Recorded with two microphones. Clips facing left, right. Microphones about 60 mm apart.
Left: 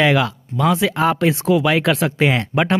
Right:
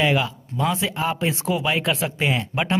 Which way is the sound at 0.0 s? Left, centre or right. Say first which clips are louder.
Left 5 dB; left.